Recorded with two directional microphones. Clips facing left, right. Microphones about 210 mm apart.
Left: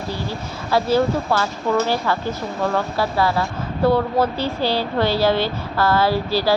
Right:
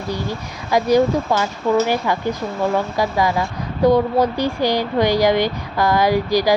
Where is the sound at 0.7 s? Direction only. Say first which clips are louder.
Right 3 dB; 15° right (ahead or behind).